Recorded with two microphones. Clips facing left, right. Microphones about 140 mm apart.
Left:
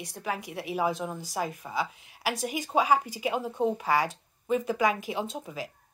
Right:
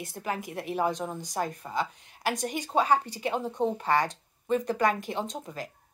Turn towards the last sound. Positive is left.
turn(degrees=5)  # may be behind; listen again after turning